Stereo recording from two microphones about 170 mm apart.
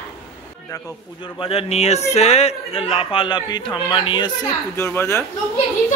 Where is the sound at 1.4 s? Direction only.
35° left (ahead or behind).